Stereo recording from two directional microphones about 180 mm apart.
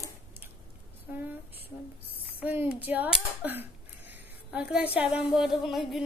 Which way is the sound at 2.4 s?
10° right (ahead or behind).